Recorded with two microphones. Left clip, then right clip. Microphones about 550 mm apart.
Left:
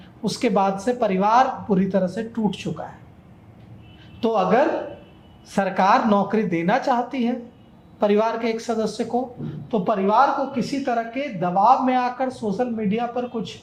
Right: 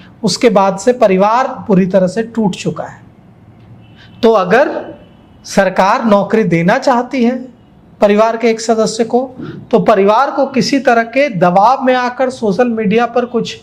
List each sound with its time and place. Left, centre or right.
0.2 s speech: right
4.2 s a woman's voice: right
9.6 s a woman's voice: right